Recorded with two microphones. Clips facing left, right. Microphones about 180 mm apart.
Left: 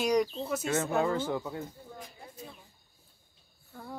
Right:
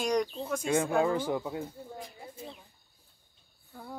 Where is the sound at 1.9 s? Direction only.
25° right (ahead or behind).